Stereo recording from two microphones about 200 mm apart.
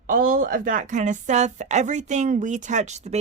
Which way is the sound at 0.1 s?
45° right (ahead or behind).